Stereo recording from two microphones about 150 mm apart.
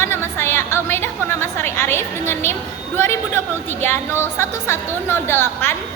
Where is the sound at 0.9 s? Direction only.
15° left (ahead or behind).